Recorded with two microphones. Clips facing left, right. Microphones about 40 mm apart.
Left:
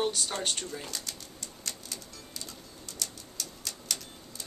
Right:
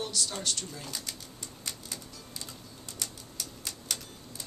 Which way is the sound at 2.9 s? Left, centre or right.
Centre.